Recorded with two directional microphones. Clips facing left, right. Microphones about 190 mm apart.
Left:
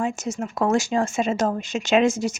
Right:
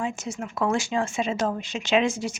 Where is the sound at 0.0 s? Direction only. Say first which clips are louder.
Left 4 dB; 40° left (ahead or behind).